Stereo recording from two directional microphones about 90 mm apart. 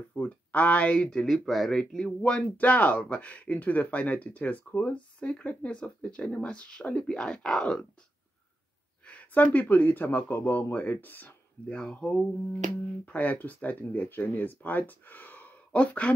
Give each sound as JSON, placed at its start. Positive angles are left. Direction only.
{"t": 0.1, "sound": "speech", "side_deg": 15}
{"t": 9.0, "sound": "speech", "side_deg": 15}